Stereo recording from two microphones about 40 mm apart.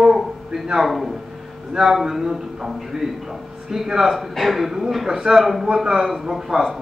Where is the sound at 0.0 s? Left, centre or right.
Centre.